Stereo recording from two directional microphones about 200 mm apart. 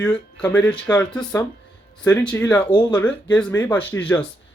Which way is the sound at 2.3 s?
10° left (ahead or behind).